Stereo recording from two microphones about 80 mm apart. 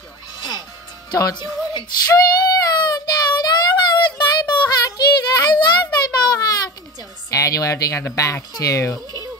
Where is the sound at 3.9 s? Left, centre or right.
Left.